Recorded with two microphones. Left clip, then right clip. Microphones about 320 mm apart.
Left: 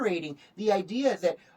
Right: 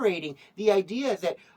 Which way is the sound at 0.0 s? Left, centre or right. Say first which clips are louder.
Right 3 dB; centre.